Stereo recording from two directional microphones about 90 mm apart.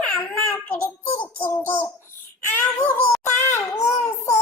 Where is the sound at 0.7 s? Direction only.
20° left (ahead or behind).